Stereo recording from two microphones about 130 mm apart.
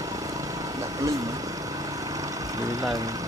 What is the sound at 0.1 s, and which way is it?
Vehicle, 25° right (ahead or behind).